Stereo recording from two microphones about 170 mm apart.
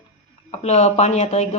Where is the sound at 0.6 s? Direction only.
40° left (ahead or behind).